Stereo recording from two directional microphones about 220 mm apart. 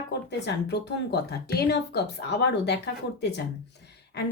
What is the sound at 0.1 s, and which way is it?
Speech, 50° left (ahead or behind).